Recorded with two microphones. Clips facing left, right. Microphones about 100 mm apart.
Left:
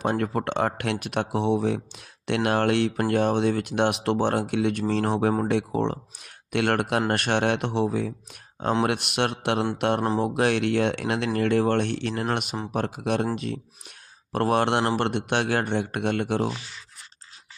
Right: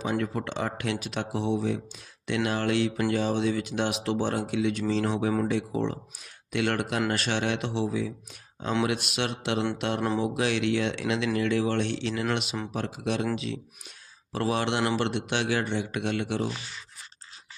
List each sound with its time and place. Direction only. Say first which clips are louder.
0.0 s speech: left 4 dB; 55° left (ahead or behind)